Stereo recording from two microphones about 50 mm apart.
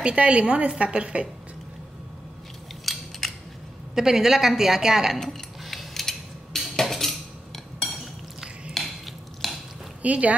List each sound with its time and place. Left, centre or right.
0.0 s a woman's voice: right
2.8 s scissors: centre
3.9 s a woman's voice: centre
5.6 s cutlery: centre
8.7 s stir: centre
10.0 s a woman's voice: right